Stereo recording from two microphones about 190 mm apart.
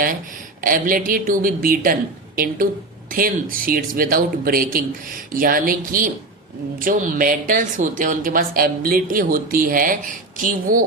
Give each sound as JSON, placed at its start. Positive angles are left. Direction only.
{"t": 0.6, "sound": "a woman's voice", "side_deg": -45}